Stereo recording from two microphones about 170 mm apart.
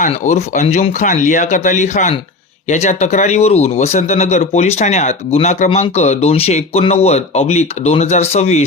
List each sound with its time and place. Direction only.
0.0 s speech: 45° left (ahead or behind)